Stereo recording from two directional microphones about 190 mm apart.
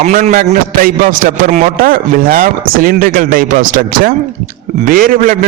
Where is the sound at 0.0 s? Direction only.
40° right (ahead or behind).